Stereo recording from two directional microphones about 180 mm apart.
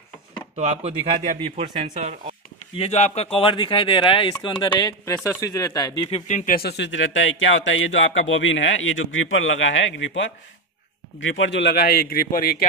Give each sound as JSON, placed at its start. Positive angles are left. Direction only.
{"t": 0.6, "sound": "speech", "side_deg": -40}
{"t": 2.7, "sound": "speech", "side_deg": 35}
{"t": 6.0, "sound": "speech", "side_deg": 35}
{"t": 6.8, "sound": "speech", "side_deg": 90}